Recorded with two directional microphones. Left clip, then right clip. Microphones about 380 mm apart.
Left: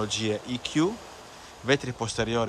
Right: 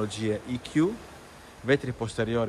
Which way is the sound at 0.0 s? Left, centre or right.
Centre.